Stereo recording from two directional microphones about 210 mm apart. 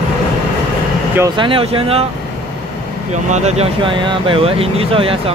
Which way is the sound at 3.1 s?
35° right (ahead or behind).